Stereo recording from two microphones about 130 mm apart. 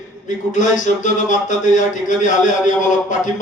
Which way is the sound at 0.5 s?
70° left (ahead or behind).